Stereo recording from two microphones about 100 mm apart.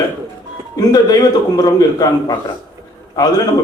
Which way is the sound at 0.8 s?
40° left (ahead or behind).